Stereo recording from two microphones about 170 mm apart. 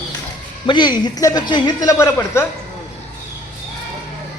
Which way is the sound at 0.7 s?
25° left (ahead or behind).